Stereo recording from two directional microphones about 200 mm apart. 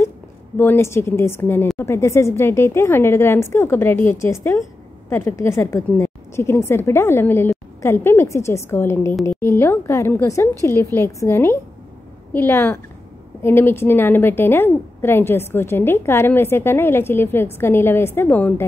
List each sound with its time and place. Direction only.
0.6 s a woman's voice: 10° left (ahead or behind)